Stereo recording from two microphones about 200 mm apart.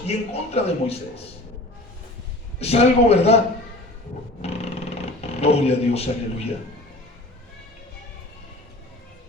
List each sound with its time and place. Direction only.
0.0 s a man's voice: 30° left (ahead or behind)
2.6 s a man's voice: 30° left (ahead or behind)
4.4 s a sound: 30° left (ahead or behind)